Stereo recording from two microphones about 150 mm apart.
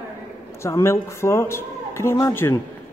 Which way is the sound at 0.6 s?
20° left (ahead or behind).